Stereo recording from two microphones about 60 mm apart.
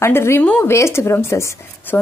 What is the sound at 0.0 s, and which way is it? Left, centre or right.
A woman's voice, left.